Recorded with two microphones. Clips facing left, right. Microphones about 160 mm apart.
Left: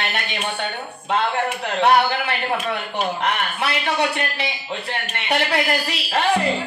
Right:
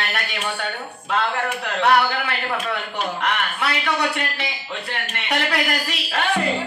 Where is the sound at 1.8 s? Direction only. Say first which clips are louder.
Left 1 dB; 25° left (ahead or behind).